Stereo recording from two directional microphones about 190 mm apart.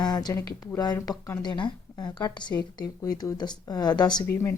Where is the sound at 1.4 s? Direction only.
25° left (ahead or behind).